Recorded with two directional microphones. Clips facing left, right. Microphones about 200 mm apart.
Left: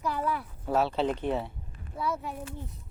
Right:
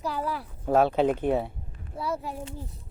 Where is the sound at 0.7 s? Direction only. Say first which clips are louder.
Right 5 dB; 50° right (ahead or behind).